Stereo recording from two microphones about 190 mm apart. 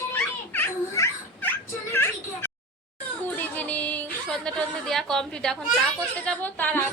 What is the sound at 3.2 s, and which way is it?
A woman's voice, 10° left (ahead or behind).